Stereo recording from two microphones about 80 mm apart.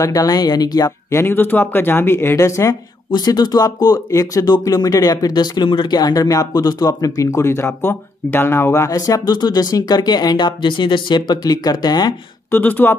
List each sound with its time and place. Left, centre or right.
0.0 s speech: left
1.1 s speech: left
3.1 s speech: left
8.9 s speech: left
12.4 s speech: left